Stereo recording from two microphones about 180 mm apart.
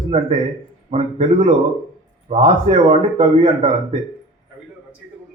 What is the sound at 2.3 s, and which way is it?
Speech, 40° right (ahead or behind).